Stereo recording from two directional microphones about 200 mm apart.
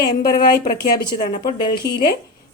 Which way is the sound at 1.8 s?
50° left (ahead or behind).